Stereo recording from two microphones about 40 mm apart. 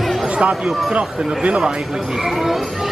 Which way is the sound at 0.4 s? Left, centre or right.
Right.